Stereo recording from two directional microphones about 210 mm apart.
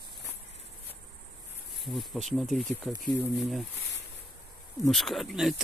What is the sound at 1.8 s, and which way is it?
Speech, centre (ahead or behind).